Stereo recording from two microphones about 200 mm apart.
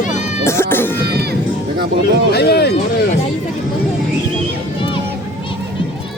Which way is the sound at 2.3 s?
50° left (ahead or behind).